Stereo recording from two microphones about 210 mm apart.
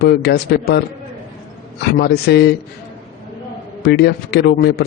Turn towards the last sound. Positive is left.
turn(degrees=50)  # may be behind; listen again after turning